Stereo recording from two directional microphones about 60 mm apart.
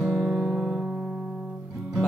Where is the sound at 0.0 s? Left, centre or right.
Centre.